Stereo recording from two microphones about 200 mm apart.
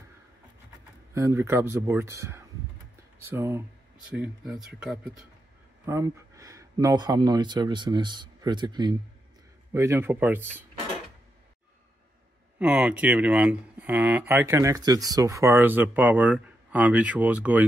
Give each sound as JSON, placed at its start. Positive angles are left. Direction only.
{"t": 1.1, "sound": "speech", "side_deg": -15}
{"t": 5.9, "sound": "speech", "side_deg": -15}
{"t": 12.5, "sound": "speech", "side_deg": -5}